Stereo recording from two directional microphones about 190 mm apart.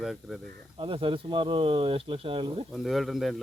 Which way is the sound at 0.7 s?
30° right (ahead or behind).